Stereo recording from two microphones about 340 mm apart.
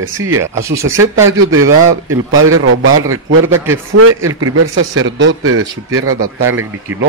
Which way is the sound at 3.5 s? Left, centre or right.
Centre.